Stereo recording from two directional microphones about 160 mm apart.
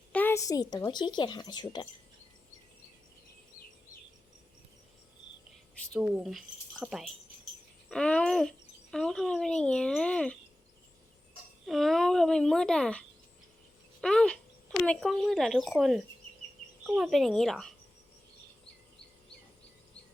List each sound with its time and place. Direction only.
0.1 s speech: 10° left (ahead or behind)
5.9 s a child's voice: 10° right (ahead or behind)
11.6 s a child's voice: centre (ahead or behind)